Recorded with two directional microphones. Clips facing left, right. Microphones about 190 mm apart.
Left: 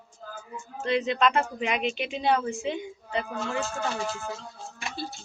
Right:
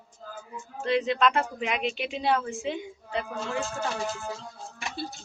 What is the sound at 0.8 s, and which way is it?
Speech, centre (ahead or behind).